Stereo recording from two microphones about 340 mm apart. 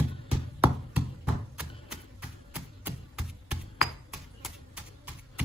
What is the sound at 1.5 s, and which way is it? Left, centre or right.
Typewriter, centre.